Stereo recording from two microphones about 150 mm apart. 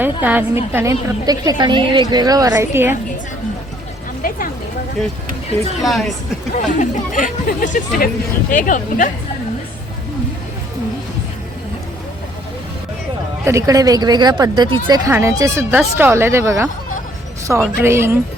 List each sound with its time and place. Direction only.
0.2 s a woman's voice: 10° right (ahead or behind)
5.8 s a woman's voice: centre (ahead or behind)
6.5 s speech: 60° left (ahead or behind)
13.4 s a woman's voice: 20° right (ahead or behind)
17.7 s speech: 15° right (ahead or behind)